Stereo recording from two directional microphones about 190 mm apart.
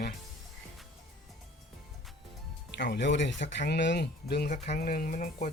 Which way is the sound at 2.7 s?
65° left (ahead or behind).